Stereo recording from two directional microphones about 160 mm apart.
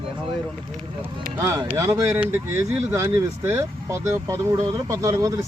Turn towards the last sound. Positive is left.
turn(degrees=-20)  # may be behind; listen again after turning